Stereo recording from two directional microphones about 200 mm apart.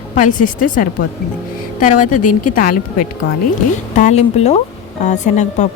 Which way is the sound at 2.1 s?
40° left (ahead or behind).